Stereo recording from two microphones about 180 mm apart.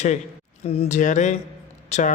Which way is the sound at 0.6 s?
35° left (ahead or behind).